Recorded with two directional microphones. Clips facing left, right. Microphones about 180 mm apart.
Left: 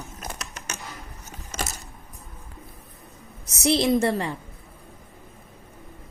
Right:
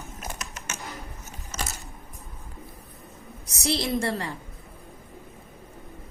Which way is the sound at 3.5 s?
20° left (ahead or behind).